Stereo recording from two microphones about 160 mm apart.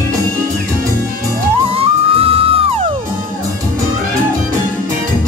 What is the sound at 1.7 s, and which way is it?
Music, 40° right (ahead or behind).